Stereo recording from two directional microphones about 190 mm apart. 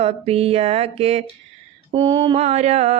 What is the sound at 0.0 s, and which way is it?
Mantra, 30° right (ahead or behind).